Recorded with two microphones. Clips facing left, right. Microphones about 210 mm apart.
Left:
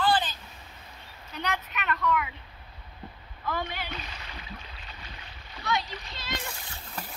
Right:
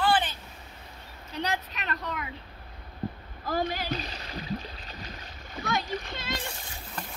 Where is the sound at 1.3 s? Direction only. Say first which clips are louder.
Right 1 dB; 30° right (ahead or behind).